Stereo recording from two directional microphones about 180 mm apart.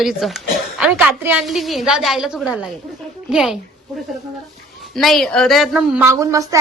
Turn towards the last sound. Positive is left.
turn(degrees=-15)  # may be behind; listen again after turning